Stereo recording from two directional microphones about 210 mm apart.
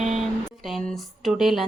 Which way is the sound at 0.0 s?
Centre (ahead or behind).